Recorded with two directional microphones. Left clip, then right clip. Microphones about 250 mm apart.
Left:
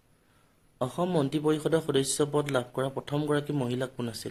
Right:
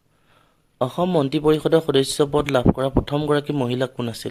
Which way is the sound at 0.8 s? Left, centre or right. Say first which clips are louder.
Right 8 dB; right.